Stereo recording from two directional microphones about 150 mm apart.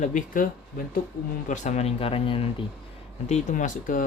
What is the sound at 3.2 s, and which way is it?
Speech, 50° left (ahead or behind).